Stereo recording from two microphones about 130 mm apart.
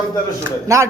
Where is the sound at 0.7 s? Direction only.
25° right (ahead or behind).